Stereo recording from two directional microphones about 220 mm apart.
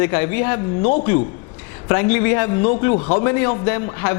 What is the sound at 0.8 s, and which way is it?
Speech, 30° left (ahead or behind).